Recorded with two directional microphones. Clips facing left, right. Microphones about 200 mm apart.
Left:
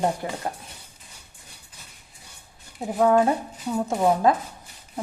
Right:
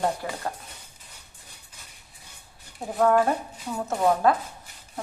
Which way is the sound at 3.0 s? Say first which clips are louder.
Left 2 dB; 15° left (ahead or behind).